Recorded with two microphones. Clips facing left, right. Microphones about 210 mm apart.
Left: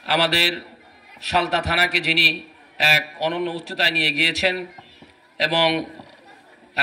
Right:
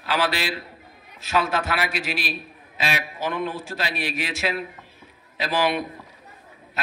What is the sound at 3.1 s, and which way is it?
Speech, 35° left (ahead or behind).